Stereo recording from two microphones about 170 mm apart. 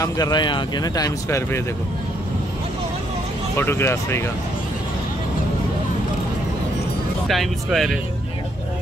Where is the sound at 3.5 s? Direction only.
15° left (ahead or behind).